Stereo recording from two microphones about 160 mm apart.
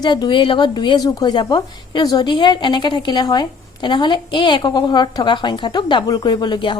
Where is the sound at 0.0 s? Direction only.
25° left (ahead or behind).